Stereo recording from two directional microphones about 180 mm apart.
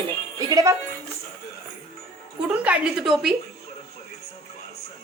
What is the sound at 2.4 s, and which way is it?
Speech, 5° right (ahead or behind).